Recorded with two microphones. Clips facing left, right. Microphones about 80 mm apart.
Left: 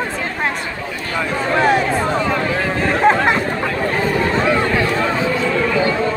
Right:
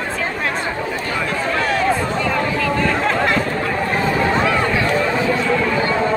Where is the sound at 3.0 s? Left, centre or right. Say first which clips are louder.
Left 4 dB; left.